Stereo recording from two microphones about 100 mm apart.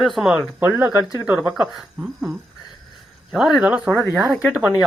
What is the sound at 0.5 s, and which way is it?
Speech, 20° right (ahead or behind).